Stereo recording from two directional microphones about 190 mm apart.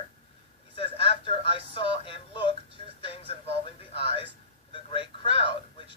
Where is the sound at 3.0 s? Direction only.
30° left (ahead or behind).